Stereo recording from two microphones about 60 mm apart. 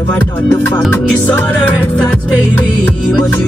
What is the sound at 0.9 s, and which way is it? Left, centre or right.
Music, left.